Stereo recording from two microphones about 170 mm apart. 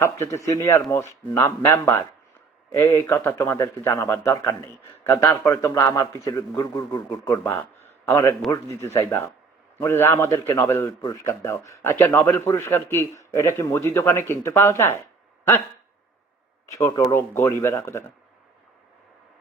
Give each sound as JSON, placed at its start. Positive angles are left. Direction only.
{"t": 0.0, "sound": "a man's voice", "side_deg": 15}
{"t": 16.7, "sound": "a man's voice", "side_deg": 20}